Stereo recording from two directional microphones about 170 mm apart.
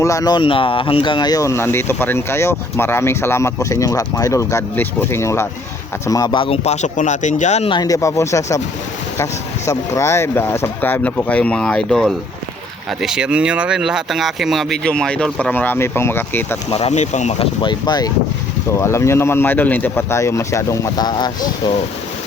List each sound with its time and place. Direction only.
0.0 s speech: 20° left (ahead or behind); by 7.8 s 40° left (ahead or behind)
7.8 s speech: 20° left (ahead or behind)
16.6 s speech: 40° left (ahead or behind)
17.6 s speech: 25° left (ahead or behind)